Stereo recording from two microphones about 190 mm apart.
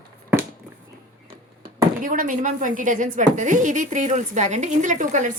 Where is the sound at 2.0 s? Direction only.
45° right (ahead or behind).